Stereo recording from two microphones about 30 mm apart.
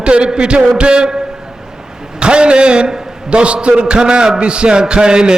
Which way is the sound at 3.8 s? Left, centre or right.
Right.